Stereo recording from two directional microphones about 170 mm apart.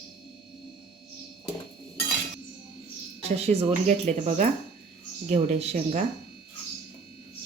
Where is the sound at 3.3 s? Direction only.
40° right (ahead or behind).